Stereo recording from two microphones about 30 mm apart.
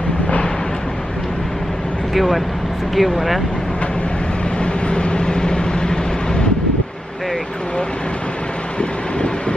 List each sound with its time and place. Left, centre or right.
2.1 s speech: centre
4.8 s vehicle: left